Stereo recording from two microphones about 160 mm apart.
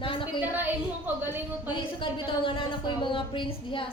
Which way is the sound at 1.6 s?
30° left (ahead or behind).